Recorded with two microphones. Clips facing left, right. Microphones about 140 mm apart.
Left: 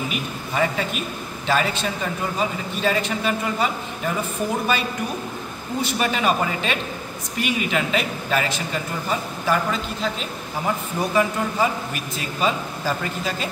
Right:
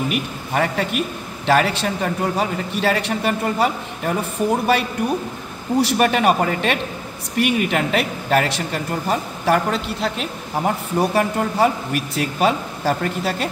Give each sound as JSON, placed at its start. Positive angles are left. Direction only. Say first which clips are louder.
{"t": 0.1, "sound": "speech", "louder": "right 4 dB", "side_deg": -60}